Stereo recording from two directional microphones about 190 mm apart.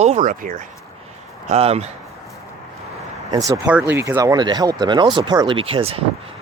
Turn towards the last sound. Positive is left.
turn(degrees=-30)  # may be behind; listen again after turning